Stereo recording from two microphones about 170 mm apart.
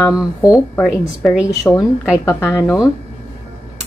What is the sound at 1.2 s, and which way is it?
Speech, 5° right (ahead or behind).